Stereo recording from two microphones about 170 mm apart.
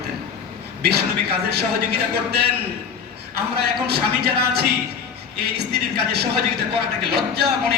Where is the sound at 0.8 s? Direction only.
70° right (ahead or behind).